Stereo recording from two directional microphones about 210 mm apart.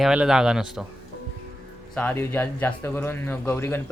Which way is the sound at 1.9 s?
10° left (ahead or behind).